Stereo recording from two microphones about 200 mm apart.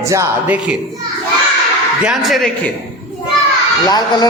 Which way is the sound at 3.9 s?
20° left (ahead or behind).